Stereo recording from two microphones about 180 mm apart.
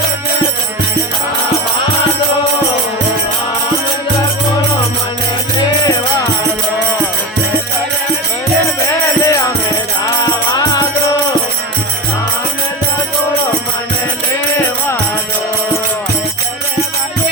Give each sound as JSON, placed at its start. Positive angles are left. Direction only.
{"t": 5.8, "sound": "music", "side_deg": 20}
{"t": 9.2, "sound": "music", "side_deg": 15}
{"t": 10.5, "sound": "music", "side_deg": 20}